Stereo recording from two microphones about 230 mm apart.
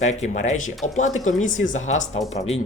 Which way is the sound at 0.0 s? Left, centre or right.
Left.